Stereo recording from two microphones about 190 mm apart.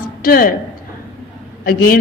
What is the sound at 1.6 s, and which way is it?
Speech, 50° left (ahead or behind).